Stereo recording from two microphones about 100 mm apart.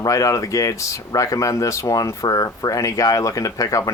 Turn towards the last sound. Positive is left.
turn(degrees=35)  # may be behind; listen again after turning